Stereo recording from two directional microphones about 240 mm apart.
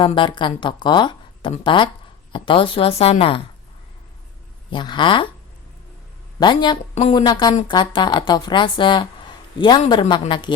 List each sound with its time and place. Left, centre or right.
0.0 s a woman's voice: centre
4.7 s a woman's voice: centre
6.4 s a woman's voice: centre